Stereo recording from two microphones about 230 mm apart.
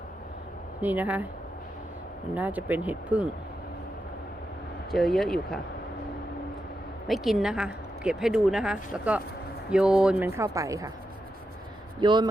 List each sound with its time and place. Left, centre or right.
0.8 s a woman's voice: centre
2.3 s a woman's voice: centre
4.9 s speech: centre
7.1 s a woman's voice: centre
11.9 s speech: centre